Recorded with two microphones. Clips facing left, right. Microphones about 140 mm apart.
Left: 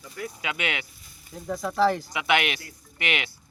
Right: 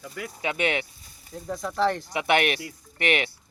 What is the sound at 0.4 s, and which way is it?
Speech, 30° right (ahead or behind).